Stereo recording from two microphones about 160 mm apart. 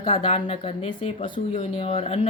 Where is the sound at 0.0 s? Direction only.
35° left (ahead or behind).